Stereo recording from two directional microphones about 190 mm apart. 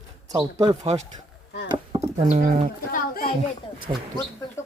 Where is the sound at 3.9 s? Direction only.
35° right (ahead or behind).